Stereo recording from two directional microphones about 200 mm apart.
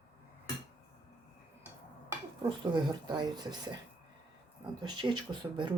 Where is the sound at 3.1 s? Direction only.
20° right (ahead or behind).